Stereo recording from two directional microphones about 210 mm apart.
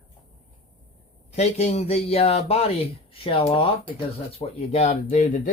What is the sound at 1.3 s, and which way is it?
Speech, 30° left (ahead or behind).